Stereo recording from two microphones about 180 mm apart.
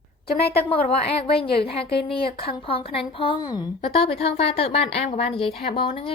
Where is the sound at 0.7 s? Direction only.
35° left (ahead or behind).